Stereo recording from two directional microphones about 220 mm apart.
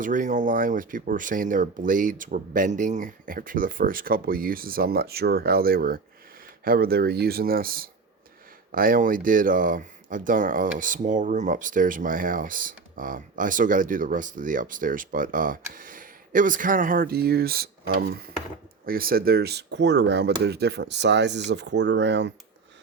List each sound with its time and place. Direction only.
0.0 s speech: 35° right (ahead or behind); by 22.3 s 50° right (ahead or behind)